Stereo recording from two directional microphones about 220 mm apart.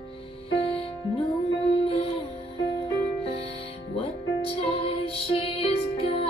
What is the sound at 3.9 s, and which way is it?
Music, 25° left (ahead or behind).